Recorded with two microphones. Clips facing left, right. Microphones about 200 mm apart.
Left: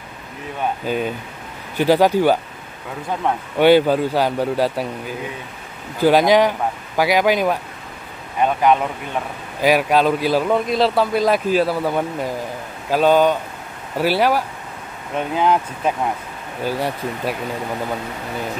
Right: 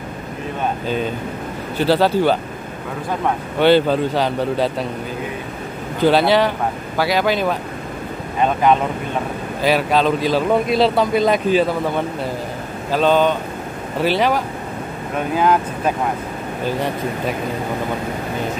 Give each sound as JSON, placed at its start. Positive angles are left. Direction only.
{"t": 0.8, "sound": "a man's voice", "side_deg": 10}
{"t": 3.5, "sound": "a man's voice", "side_deg": 10}
{"t": 5.9, "sound": "a man's voice", "side_deg": 10}
{"t": 9.6, "sound": "a man's voice", "side_deg": 10}
{"t": 10.5, "sound": "a man's voice", "side_deg": 0}
{"t": 15.1, "sound": "speech", "side_deg": 20}
{"t": 16.6, "sound": "a man's voice", "side_deg": 10}